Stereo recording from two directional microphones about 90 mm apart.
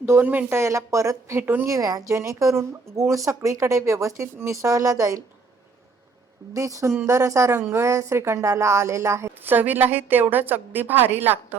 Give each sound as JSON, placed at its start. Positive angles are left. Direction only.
{"t": 0.0, "sound": "speech", "side_deg": -25}
{"t": 0.5, "sound": "speech", "side_deg": -35}
{"t": 1.6, "sound": "speech", "side_deg": -35}
{"t": 6.5, "sound": "a woman's voice", "side_deg": -35}